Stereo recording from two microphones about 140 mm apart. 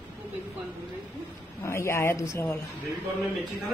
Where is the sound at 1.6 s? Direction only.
20° left (ahead or behind).